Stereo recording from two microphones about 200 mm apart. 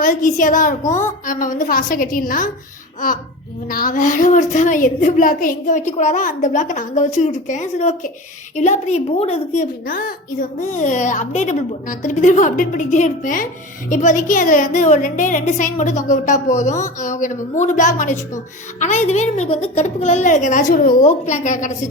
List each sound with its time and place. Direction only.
0.0 s a woman's voice: 40° left (ahead or behind)
3.7 s a woman's voice: 45° left (ahead or behind)
9.8 s a woman's voice: 45° left (ahead or behind)